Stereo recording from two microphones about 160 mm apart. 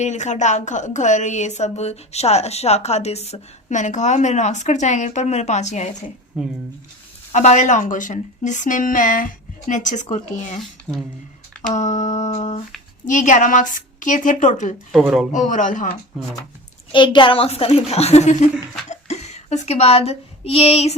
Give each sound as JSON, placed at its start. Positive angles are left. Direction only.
{"t": 0.0, "sound": "a woman's voice", "side_deg": 45}
{"t": 6.3, "sound": "speech", "side_deg": -5}
{"t": 7.3, "sound": "a woman's voice", "side_deg": 45}
{"t": 10.6, "sound": "speech", "side_deg": 0}
{"t": 11.7, "sound": "a woman's voice", "side_deg": 50}
{"t": 14.9, "sound": "speech", "side_deg": 0}
{"t": 15.3, "sound": "a woman's voice", "side_deg": 50}
{"t": 16.9, "sound": "a woman's voice", "side_deg": 30}